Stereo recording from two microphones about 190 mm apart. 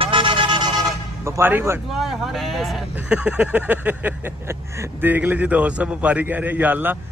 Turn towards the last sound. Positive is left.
turn(degrees=-10)  # may be behind; listen again after turning